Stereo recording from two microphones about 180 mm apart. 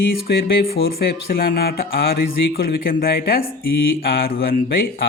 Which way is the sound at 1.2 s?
55° left (ahead or behind).